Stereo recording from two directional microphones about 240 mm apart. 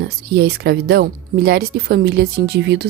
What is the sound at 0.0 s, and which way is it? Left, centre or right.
A woman's voice, right.